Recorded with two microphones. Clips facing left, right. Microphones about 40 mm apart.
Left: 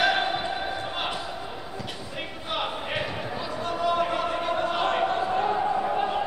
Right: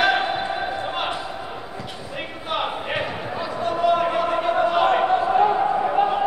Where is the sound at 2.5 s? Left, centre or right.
Centre.